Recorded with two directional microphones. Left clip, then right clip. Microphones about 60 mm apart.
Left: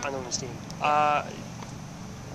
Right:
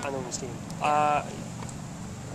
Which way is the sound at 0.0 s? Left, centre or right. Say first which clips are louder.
Even; left.